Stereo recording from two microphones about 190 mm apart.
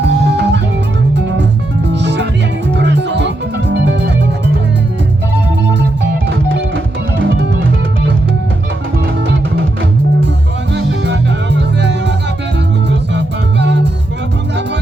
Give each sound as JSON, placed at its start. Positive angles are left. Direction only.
{"t": 0.0, "sound": "music", "side_deg": -65}
{"t": 10.8, "sound": "music", "side_deg": -65}